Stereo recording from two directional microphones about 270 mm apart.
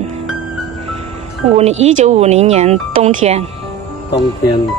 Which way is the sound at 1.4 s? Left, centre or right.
Right.